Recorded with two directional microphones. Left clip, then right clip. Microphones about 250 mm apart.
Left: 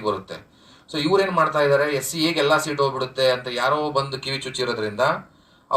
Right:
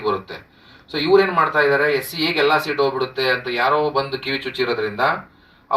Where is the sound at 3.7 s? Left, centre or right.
Right.